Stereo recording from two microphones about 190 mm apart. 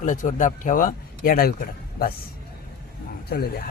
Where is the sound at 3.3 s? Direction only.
55° left (ahead or behind).